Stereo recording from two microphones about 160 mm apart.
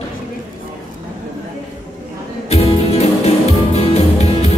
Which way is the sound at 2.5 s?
40° left (ahead or behind).